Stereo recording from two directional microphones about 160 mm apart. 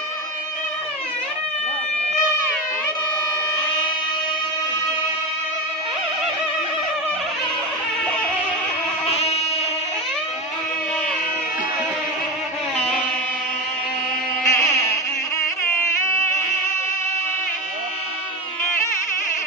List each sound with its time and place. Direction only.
9.0 s music: 40° left (ahead or behind)
14.4 s insect: 15° left (ahead or behind)
16.0 s music: 15° left (ahead or behind)